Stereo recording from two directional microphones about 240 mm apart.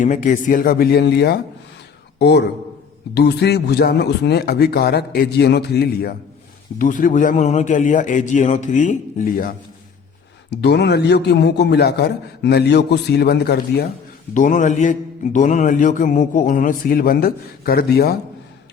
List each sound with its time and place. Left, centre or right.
0.0 s mantra: left
2.1 s a man's voice: left
6.7 s mantra: left
10.5 s a man's voice: left
14.3 s mantra: left